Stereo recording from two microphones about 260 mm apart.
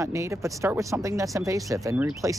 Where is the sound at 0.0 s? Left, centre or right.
Centre.